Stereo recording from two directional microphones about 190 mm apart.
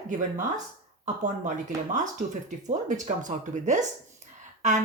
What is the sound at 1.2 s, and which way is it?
Speech, 40° right (ahead or behind).